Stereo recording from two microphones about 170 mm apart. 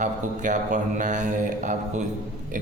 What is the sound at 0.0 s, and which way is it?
A man's voice, 45° right (ahead or behind).